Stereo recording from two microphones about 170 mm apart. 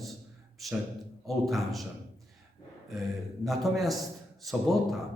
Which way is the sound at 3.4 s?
Centre (ahead or behind).